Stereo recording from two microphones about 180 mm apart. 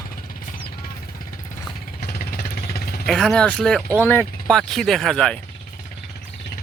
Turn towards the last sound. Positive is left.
turn(degrees=5)  # may be behind; listen again after turning